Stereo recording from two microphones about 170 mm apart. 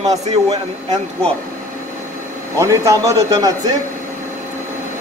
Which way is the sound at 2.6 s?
15° right (ahead or behind).